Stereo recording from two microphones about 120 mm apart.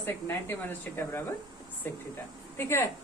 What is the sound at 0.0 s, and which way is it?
A woman's voice, 20° left (ahead or behind).